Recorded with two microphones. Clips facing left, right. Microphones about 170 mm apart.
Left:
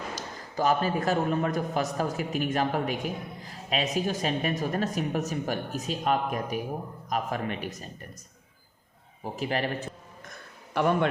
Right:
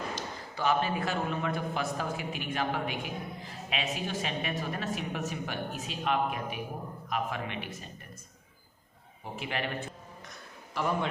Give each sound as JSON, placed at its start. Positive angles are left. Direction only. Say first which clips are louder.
{"t": 0.2, "sound": "a man's voice", "louder": "left 5 dB", "side_deg": 45}
{"t": 9.2, "sound": "a man's voice", "louder": "left 6 dB", "side_deg": 40}
{"t": 10.8, "sound": "speech", "louder": "left 6 dB", "side_deg": 65}